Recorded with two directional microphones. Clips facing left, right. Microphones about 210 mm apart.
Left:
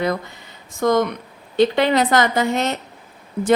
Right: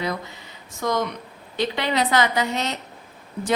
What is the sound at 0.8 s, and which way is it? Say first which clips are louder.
A woman's voice: left 7 dB; 50° left (ahead or behind).